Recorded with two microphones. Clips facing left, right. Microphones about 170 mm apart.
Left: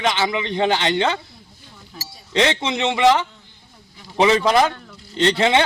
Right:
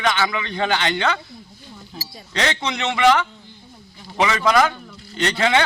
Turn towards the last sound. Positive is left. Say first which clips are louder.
# left 2 dB
turn(degrees=25)  # may be behind; listen again after turning